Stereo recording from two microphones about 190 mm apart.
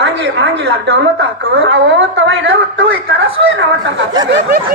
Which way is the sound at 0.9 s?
70° right (ahead or behind).